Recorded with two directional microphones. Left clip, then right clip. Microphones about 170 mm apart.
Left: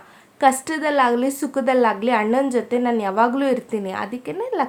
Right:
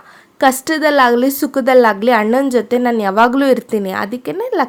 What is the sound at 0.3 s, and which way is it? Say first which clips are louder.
A woman's voice: right 4 dB; 35° right (ahead or behind).